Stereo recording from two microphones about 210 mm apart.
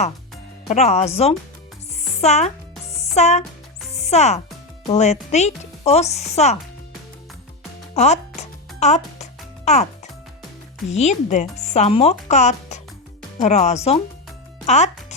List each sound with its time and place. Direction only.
0.7 s speech: 30° left (ahead or behind)
2.9 s music: 30° left (ahead or behind)
4.9 s speech: 30° left (ahead or behind)
7.9 s speech: 30° left (ahead or behind)
8.4 s music: 35° left (ahead or behind)
9.6 s speech: 30° left (ahead or behind)
10.9 s speech: 35° left (ahead or behind)